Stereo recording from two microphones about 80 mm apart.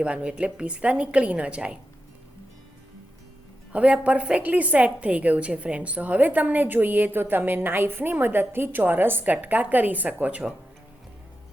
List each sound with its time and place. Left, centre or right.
0.0 s a woman's voice: centre
3.7 s a woman's voice: centre